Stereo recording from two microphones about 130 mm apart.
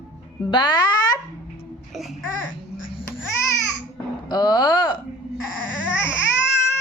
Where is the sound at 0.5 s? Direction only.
35° left (ahead or behind).